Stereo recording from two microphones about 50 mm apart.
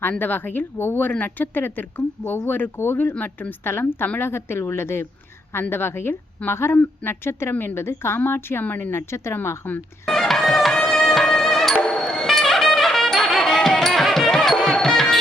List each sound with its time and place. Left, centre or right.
0.1 s speech: left
3.1 s speech: left
3.6 s speech: left
8.9 s speech: left
10.1 s music: centre
11.8 s music: centre
12.0 s music: centre